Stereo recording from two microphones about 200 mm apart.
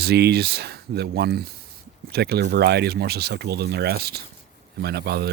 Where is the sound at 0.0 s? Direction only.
50° right (ahead or behind).